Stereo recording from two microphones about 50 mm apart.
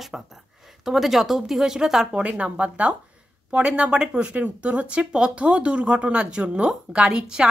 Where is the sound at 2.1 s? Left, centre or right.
Right.